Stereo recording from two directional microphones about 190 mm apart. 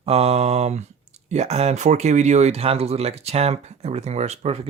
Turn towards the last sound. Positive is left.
turn(degrees=-35)  # may be behind; listen again after turning